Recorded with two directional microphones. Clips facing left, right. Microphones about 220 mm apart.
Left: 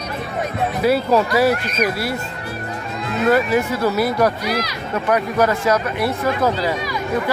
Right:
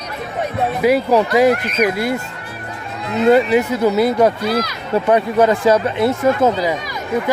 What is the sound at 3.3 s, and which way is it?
Speech, 20° right (ahead or behind).